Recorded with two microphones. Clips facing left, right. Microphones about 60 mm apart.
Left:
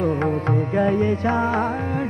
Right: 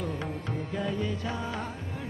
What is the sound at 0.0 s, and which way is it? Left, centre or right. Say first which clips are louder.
Music: left 13 dB; left.